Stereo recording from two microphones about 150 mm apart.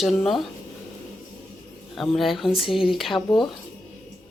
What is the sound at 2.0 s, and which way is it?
Speech, centre (ahead or behind).